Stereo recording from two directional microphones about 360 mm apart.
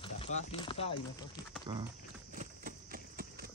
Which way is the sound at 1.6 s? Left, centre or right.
Centre.